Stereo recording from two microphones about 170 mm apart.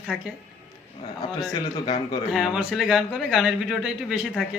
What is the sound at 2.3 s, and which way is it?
A man's voice, centre (ahead or behind).